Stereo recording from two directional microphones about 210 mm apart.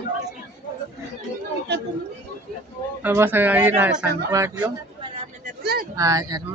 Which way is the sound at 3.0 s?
10° right (ahead or behind).